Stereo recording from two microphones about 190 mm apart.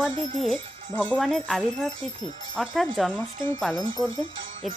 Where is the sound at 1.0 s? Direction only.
5° left (ahead or behind).